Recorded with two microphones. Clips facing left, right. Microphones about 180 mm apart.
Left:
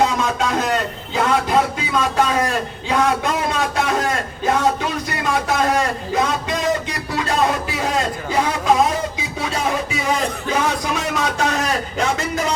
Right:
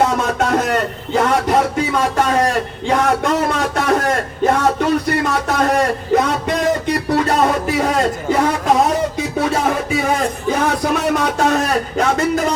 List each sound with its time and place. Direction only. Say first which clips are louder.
0.0 s a sound: right 2 dB; 60° right (ahead or behind)
2.8 s speech: right 3 dB; 65° right (ahead or behind)
6.2 s music: right 3 dB; 60° right (ahead or behind)
8.3 s speech: right 4 dB; 60° right (ahead or behind)
10.6 s a man's voice: right 4 dB; 55° right (ahead or behind)